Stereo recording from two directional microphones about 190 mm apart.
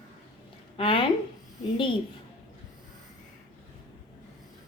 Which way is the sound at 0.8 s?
25° left (ahead or behind).